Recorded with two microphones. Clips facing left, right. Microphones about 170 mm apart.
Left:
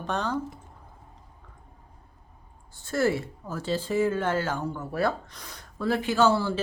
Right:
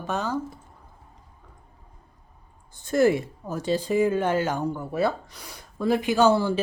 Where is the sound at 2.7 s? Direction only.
20° right (ahead or behind).